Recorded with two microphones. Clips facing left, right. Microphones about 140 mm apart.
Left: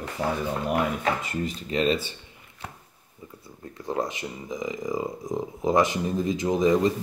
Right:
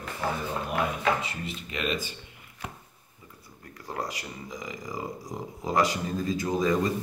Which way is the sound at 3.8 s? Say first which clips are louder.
Left 6 dB; 20° left (ahead or behind).